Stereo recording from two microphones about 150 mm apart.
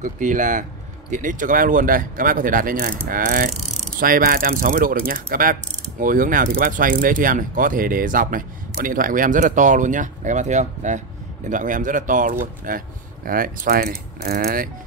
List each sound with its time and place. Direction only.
0.0 s speech: 60° right (ahead or behind); by 14.7 s 75° right (ahead or behind)